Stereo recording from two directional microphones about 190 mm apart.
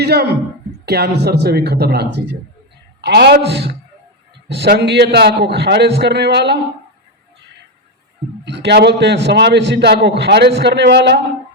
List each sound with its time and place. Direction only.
0.0 s a man's voice: 60° right (ahead or behind)
8.4 s a man's voice: 65° right (ahead or behind)